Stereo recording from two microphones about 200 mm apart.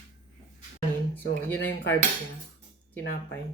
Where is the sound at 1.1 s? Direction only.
10° left (ahead or behind).